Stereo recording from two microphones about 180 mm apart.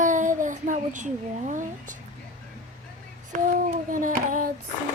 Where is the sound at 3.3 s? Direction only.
50° right (ahead or behind).